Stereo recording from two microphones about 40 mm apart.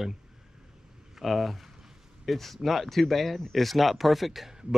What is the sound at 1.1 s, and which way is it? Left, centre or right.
Speech, centre.